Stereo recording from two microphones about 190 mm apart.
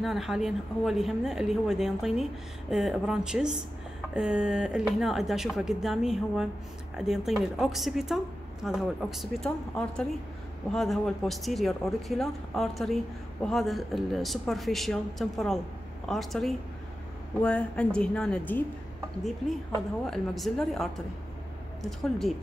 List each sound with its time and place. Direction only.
0.0 s a woman's voice: centre (ahead or behind)
20.1 s a woman's voice: centre (ahead or behind)